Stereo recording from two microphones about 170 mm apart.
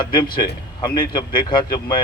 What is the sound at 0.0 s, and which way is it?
Speech, 25° left (ahead or behind).